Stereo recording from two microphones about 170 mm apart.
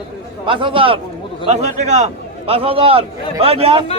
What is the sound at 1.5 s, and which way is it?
A man's voice, 40° right (ahead or behind).